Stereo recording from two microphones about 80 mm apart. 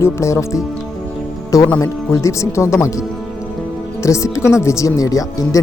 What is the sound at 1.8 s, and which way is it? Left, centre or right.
Speech, left.